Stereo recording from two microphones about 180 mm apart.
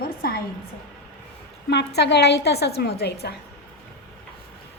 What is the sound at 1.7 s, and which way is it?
A woman's voice, 70° left (ahead or behind).